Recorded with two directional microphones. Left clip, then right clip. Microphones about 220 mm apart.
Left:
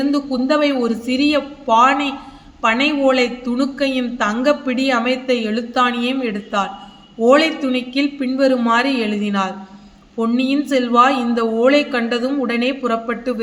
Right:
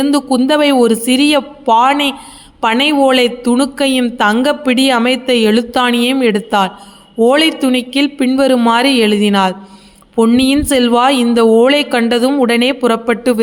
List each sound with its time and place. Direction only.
0.0 s a woman's voice: 50° right (ahead or behind)